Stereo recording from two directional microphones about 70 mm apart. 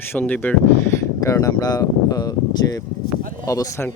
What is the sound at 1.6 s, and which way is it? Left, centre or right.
Speech, left.